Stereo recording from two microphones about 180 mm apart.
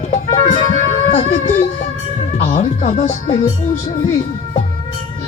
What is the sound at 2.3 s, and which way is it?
Speech, 35° left (ahead or behind).